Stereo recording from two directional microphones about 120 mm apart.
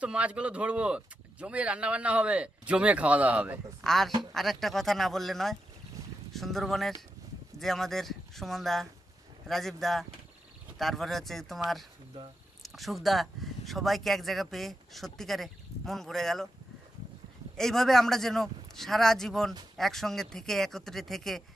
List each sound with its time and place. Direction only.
0.0 s speech: 10° right (ahead or behind)
3.8 s speech: 5° left (ahead or behind)
17.6 s speech: 5° left (ahead or behind)